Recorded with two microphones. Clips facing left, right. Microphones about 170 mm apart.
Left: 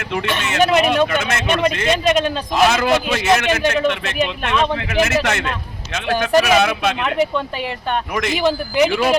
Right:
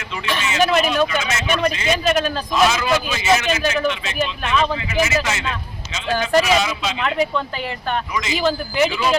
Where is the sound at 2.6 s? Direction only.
60° left (ahead or behind).